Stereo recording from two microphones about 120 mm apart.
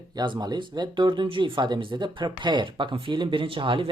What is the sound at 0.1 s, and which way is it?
Speech, 35° right (ahead or behind).